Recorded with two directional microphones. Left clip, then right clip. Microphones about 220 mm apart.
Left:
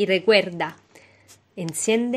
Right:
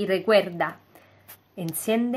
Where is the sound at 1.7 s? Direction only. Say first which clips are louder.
Left 3 dB; 30° left (ahead or behind).